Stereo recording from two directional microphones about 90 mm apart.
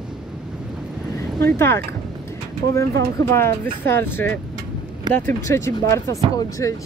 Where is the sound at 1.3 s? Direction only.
30° left (ahead or behind).